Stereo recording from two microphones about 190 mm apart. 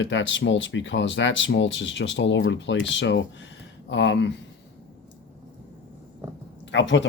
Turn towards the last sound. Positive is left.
turn(degrees=75)  # may be behind; listen again after turning